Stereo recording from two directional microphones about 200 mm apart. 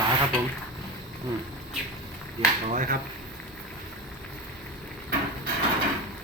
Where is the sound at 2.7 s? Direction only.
40° right (ahead or behind).